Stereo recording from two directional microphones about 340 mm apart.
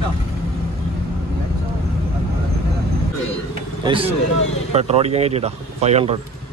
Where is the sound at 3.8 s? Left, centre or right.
Centre.